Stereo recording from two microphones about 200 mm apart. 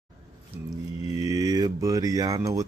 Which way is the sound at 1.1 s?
20° right (ahead or behind).